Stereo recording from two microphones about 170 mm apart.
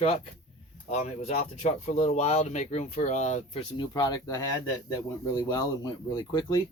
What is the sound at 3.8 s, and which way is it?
Speech, 25° left (ahead or behind).